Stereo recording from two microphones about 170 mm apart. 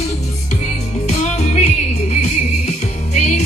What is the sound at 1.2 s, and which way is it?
Music, 40° left (ahead or behind).